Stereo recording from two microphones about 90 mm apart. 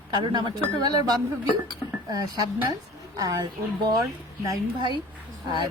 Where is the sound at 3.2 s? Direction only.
40° right (ahead or behind).